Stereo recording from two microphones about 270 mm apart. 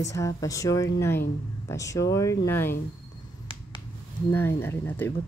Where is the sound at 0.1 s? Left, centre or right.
Centre.